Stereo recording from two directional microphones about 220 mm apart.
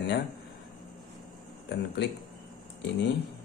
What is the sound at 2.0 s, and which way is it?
Speech, 50° left (ahead or behind).